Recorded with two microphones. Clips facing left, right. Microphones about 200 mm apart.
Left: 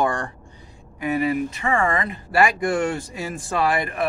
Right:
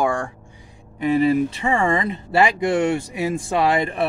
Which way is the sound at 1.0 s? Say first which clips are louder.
Right 5 dB; 30° right (ahead or behind).